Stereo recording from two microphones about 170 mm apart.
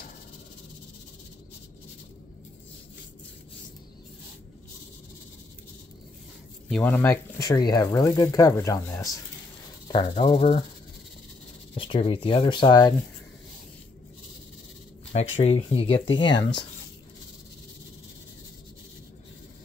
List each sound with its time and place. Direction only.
6.7 s speech: 10° left (ahead or behind)
9.9 s speech: 30° left (ahead or behind)
11.7 s speech: 30° left (ahead or behind)
15.1 s speech: 35° left (ahead or behind)